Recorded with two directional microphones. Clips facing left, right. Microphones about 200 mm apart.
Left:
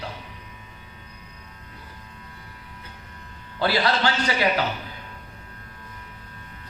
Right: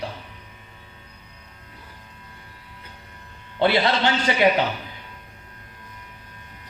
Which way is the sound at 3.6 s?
25° right (ahead or behind).